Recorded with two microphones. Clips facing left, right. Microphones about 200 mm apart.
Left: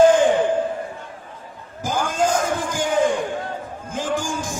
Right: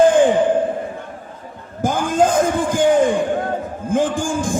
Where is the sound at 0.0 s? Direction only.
55° right (ahead or behind).